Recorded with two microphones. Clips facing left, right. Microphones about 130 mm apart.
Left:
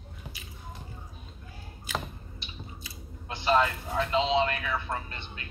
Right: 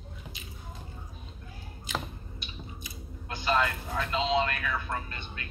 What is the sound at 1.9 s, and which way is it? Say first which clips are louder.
Typing: left 1 dB; 20° right (ahead or behind).